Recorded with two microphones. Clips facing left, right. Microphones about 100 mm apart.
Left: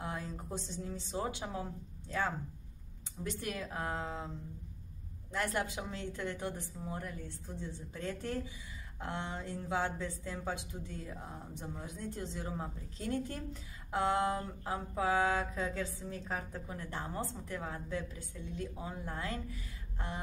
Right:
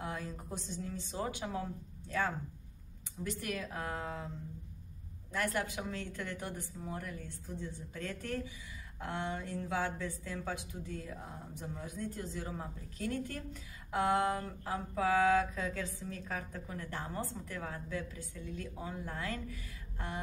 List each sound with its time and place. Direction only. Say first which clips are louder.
0.0 s a woman's voice: even; 25° left (ahead or behind)
5.3 s a woman's voice: even; 20° left (ahead or behind)